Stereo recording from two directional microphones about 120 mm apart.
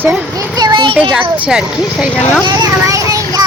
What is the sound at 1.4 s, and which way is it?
Speech, 5° right (ahead or behind).